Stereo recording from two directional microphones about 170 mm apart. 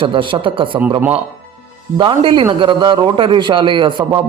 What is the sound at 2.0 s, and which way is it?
A man's voice, 30° right (ahead or behind).